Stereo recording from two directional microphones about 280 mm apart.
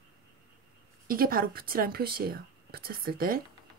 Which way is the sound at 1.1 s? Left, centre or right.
Right.